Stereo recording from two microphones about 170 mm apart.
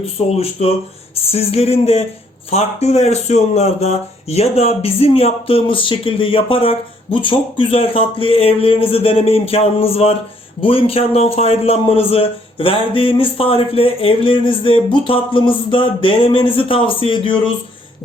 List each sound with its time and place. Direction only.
0.3 s speech: 35° left (ahead or behind)